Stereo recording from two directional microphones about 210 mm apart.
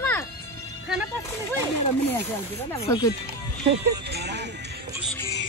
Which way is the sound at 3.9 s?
50° right (ahead or behind).